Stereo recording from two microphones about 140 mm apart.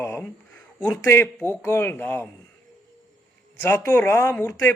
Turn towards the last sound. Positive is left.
turn(degrees=25)  # may be behind; listen again after turning